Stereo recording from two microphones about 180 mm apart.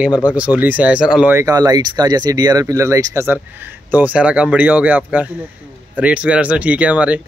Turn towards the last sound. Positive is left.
turn(degrees=-5)  # may be behind; listen again after turning